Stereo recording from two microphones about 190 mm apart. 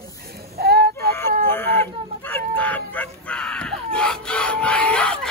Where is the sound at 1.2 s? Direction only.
10° left (ahead or behind).